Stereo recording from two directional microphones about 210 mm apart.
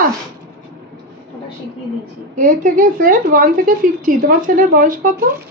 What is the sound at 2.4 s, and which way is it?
Speech, 40° right (ahead or behind).